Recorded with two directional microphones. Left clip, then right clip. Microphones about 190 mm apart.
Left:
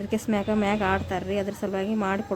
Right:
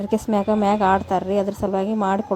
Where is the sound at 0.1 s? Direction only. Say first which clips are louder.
Right 6 dB; 20° right (ahead or behind).